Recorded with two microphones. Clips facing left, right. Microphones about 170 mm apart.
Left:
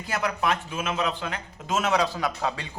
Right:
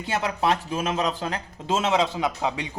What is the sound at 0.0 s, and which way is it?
A man's voice, 25° right (ahead or behind).